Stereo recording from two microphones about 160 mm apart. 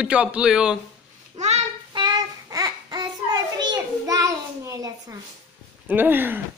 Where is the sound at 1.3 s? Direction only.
45° right (ahead or behind).